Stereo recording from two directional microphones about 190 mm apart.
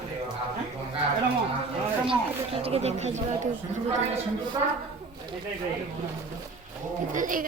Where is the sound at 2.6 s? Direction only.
35° right (ahead or behind).